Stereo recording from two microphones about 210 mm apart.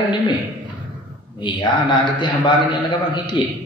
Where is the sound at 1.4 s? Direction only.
20° left (ahead or behind).